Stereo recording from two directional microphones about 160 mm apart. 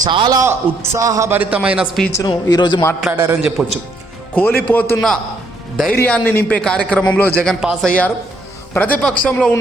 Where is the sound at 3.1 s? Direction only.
15° right (ahead or behind).